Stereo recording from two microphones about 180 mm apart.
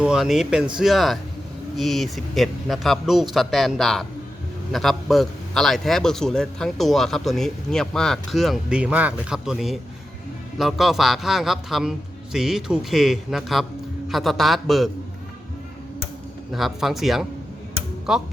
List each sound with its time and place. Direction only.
0.0 s a man's voice: 5° right (ahead or behind)
16.5 s a man's voice: centre (ahead or behind)